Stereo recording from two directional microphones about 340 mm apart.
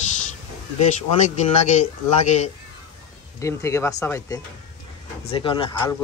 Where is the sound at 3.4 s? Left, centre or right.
Centre.